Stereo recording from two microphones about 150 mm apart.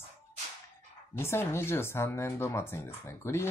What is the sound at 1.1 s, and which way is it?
Speech, 15° left (ahead or behind).